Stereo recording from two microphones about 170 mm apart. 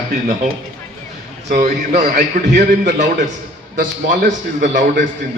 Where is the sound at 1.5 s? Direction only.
55° right (ahead or behind).